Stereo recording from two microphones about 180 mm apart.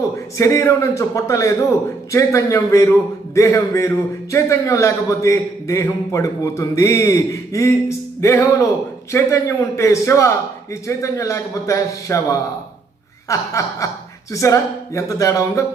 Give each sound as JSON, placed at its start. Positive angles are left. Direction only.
{"t": 0.3, "sound": "a man's voice", "side_deg": 15}